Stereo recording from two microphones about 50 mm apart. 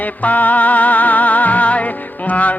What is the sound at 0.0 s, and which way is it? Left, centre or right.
Music, left.